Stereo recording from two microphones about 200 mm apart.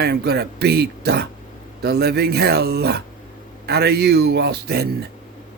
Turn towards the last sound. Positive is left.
turn(degrees=-55)  # may be behind; listen again after turning